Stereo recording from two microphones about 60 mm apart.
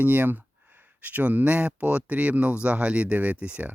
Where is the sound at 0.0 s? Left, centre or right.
Right.